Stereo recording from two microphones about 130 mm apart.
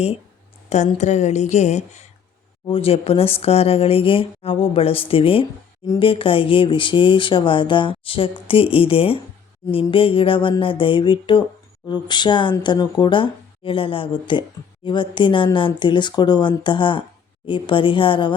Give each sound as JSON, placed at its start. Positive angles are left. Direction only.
{"t": 0.9, "sound": "a woman's voice", "side_deg": 65}
{"t": 2.6, "sound": "speech", "side_deg": 45}